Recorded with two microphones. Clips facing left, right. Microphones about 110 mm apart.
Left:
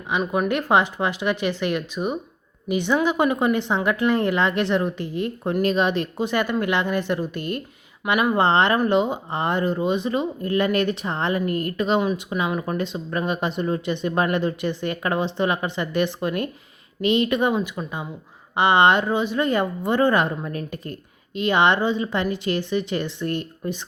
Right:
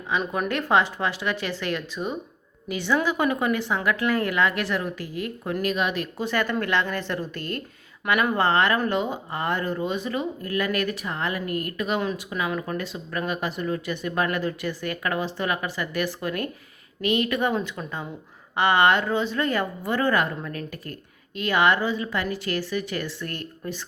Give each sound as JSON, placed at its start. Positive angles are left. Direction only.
{"t": 0.3, "sound": "speech", "side_deg": 15}